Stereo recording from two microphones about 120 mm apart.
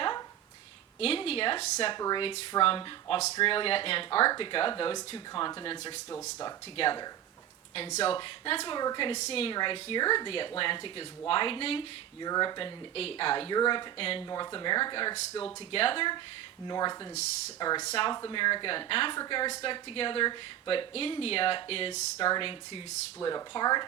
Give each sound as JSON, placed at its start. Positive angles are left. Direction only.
{"t": 0.9, "sound": "speech", "side_deg": 55}
{"t": 1.9, "sound": "speech", "side_deg": 35}
{"t": 7.9, "sound": "speech", "side_deg": 50}
{"t": 9.1, "sound": "speech", "side_deg": 60}
{"t": 9.6, "sound": "speech", "side_deg": 40}
{"t": 12.2, "sound": "speech", "side_deg": 35}
{"t": 14.3, "sound": "speech", "side_deg": 35}
{"t": 15.7, "sound": "speech", "side_deg": 50}
{"t": 16.6, "sound": "speech", "side_deg": 35}
{"t": 19.1, "sound": "speech", "side_deg": 35}